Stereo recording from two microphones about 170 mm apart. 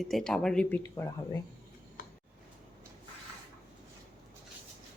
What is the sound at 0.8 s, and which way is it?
Speech, 15° left (ahead or behind).